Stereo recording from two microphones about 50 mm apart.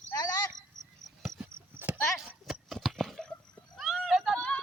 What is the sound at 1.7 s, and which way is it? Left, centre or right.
Horse, right.